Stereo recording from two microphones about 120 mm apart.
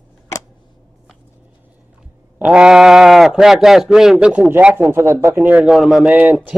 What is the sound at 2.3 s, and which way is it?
Speech, 10° right (ahead or behind).